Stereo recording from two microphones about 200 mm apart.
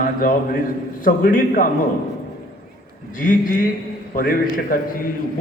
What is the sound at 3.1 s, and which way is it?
A man's voice, 40° left (ahead or behind).